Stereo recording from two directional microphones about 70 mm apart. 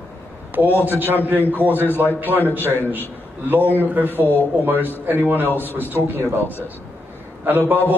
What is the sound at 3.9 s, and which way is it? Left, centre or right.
Speech, right.